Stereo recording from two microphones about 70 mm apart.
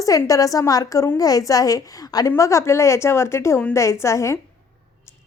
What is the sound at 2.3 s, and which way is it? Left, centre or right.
A woman's voice, left.